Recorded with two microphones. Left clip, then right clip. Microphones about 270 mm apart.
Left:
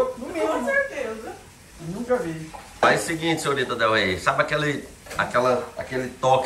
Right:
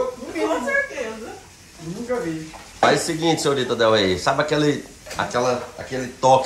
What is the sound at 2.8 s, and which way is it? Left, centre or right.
Speech, centre.